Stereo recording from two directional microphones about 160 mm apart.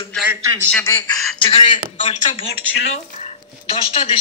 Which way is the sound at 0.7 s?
20° left (ahead or behind).